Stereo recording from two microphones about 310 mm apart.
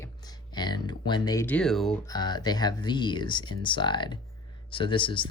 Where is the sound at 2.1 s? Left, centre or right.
Centre.